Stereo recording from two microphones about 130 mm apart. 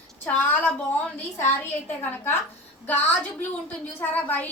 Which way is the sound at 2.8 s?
15° left (ahead or behind).